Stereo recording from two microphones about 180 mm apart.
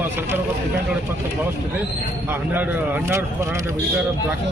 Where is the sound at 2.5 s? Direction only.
10° right (ahead or behind).